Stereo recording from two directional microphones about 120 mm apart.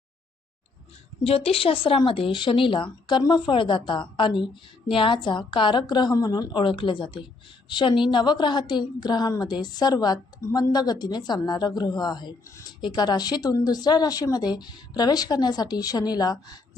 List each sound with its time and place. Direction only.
1.2 s a woman's voice: 55° left (ahead or behind); by 12.3 s 35° left (ahead or behind)
12.5 s speech: 25° left (ahead or behind)
12.8 s a woman's voice: 35° left (ahead or behind)